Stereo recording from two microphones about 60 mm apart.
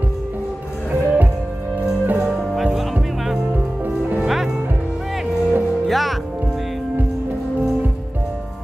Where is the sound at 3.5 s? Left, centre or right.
Right.